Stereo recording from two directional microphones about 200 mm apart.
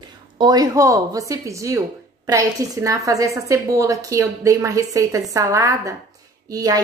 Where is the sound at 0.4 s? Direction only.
20° right (ahead or behind).